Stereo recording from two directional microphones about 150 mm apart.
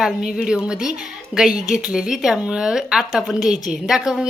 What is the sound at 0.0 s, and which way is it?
A woman's voice, 5° right (ahead or behind).